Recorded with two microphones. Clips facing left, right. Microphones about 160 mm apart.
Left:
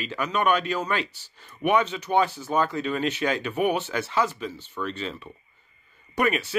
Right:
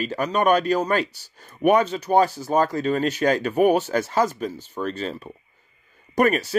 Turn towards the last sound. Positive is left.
turn(degrees=-40)  # may be behind; listen again after turning